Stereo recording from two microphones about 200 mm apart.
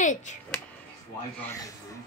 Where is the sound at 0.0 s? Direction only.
40° left (ahead or behind).